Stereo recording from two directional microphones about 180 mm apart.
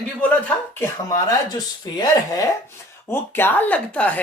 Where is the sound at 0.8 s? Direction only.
20° left (ahead or behind).